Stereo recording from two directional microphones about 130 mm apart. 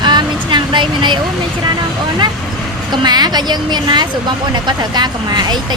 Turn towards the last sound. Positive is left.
turn(degrees=-35)  # may be behind; listen again after turning